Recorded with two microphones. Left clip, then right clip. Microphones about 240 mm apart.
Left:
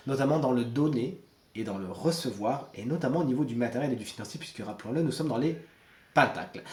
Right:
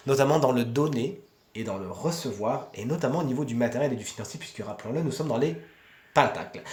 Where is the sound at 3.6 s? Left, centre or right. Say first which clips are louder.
Right 5 dB; right.